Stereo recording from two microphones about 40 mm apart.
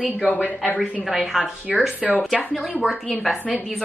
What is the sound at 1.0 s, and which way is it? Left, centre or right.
Speech, centre.